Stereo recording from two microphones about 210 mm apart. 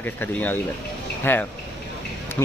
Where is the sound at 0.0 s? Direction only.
10° left (ahead or behind).